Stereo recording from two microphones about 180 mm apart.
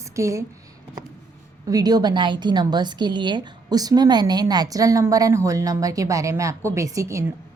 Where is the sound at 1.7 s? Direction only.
20° right (ahead or behind).